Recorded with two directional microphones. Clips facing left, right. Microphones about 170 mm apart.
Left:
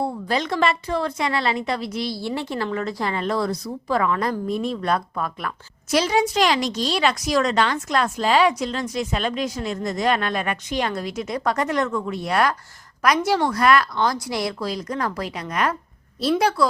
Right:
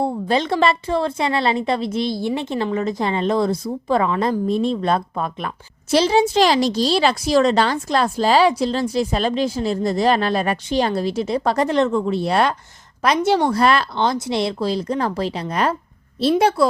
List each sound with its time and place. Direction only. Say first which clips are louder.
0.0 s a woman's voice: right 4 dB; 25° right (ahead or behind)